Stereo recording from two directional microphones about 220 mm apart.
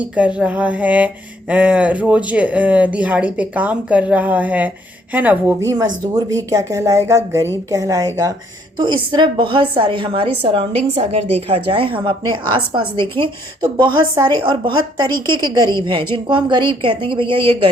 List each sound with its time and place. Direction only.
0.0 s a woman's voice: 5° right (ahead or behind); by 17.7 s 25° right (ahead or behind)